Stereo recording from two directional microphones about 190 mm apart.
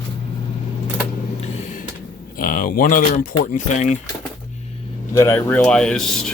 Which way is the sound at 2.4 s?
45° left (ahead or behind).